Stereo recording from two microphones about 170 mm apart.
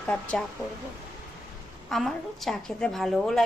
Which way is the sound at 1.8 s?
Centre (ahead or behind).